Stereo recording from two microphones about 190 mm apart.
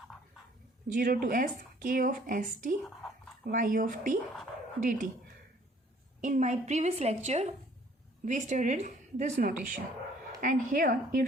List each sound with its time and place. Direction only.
0.9 s a woman's voice: 50° right (ahead or behind)
6.2 s a woman's voice: 40° right (ahead or behind)